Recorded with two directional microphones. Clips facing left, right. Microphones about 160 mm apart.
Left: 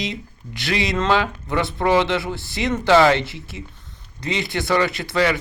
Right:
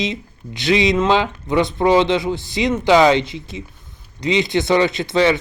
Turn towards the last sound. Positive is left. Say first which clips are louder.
# right 4 dB
turn(degrees=-20)  # may be behind; listen again after turning